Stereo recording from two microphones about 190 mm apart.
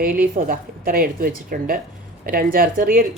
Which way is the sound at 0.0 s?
50° right (ahead or behind).